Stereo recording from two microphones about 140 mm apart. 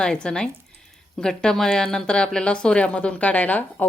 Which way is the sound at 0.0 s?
5° left (ahead or behind).